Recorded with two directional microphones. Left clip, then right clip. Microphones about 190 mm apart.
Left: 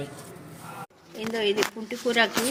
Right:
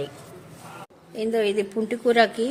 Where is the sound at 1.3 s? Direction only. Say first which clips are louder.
Right 2 dB; 40° right (ahead or behind).